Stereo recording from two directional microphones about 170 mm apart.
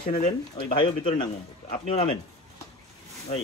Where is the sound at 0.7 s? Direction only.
30° left (ahead or behind).